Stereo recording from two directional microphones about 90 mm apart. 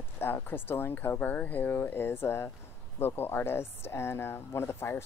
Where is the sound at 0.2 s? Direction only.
25° left (ahead or behind).